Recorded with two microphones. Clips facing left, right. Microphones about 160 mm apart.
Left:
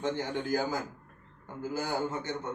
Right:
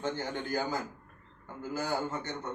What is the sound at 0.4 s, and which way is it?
A man's voice, 10° left (ahead or behind).